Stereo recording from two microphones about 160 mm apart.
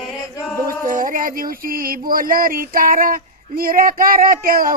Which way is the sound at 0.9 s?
60° right (ahead or behind).